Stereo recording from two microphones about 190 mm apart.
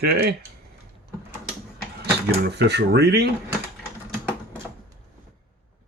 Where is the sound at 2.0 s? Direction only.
60° right (ahead or behind).